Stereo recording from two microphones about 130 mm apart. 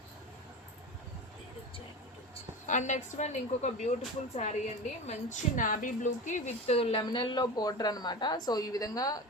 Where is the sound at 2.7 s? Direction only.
65° left (ahead or behind); by 7.0 s 50° left (ahead or behind).